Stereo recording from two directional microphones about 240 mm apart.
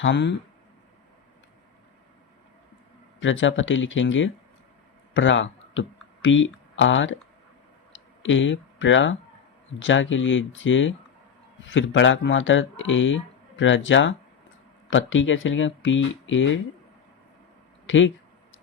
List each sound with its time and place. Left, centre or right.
0.0 s speech: left
3.2 s speech: left
17.8 s speech: left